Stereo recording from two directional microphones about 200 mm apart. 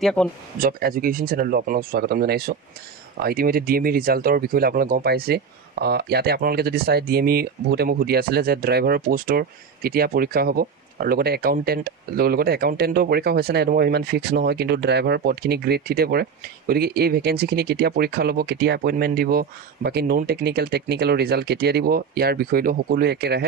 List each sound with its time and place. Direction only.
0.0 s speech: 5° left (ahead or behind)
0.6 s speech: 45° right (ahead or behind)